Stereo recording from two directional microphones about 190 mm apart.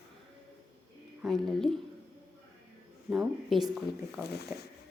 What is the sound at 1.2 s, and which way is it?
Speech, centre (ahead or behind).